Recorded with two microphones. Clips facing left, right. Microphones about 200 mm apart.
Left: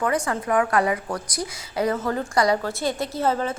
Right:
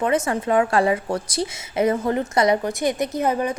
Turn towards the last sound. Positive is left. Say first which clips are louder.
# right 2 dB
turn(degrees=-15)  # may be behind; listen again after turning